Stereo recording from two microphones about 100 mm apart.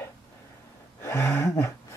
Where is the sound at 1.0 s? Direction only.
25° left (ahead or behind).